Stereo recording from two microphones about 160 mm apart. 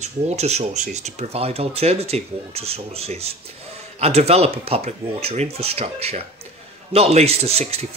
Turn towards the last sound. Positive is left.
turn(degrees=-40)  # may be behind; listen again after turning